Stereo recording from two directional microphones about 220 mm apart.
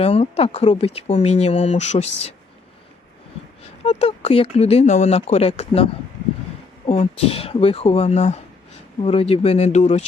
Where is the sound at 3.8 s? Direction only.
30° left (ahead or behind).